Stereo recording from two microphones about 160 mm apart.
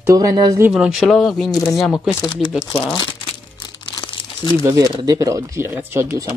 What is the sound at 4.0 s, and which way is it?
Crumpling, 35° left (ahead or behind).